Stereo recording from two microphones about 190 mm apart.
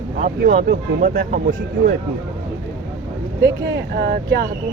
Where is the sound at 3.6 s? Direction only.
55° right (ahead or behind).